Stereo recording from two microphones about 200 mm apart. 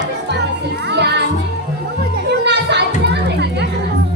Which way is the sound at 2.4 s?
60° right (ahead or behind).